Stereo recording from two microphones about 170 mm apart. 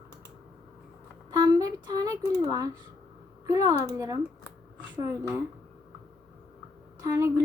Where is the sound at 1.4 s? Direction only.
25° right (ahead or behind).